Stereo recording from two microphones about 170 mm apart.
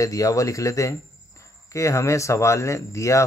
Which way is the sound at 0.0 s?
20° left (ahead or behind).